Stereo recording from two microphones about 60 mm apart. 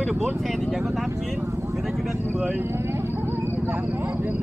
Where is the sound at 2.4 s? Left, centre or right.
Right.